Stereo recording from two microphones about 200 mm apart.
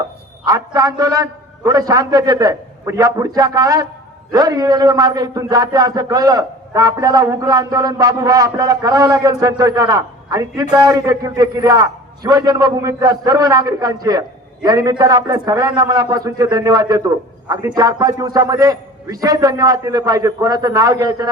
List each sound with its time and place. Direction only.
0.4 s a man's voice: 20° right (ahead or behind)